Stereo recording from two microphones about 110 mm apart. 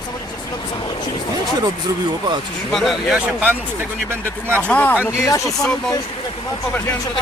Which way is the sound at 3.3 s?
15° right (ahead or behind).